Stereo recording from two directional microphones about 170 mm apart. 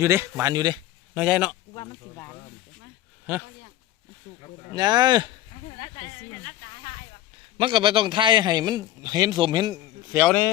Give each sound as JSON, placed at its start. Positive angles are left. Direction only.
{"t": 0.0, "sound": "a man's voice", "side_deg": -15}
{"t": 1.1, "sound": "speech", "side_deg": -5}
{"t": 1.7, "sound": "speech", "side_deg": 25}
{"t": 3.3, "sound": "speech", "side_deg": -10}
{"t": 4.7, "sound": "a man's voice", "side_deg": -25}
{"t": 7.6, "sound": "a man's voice", "side_deg": -30}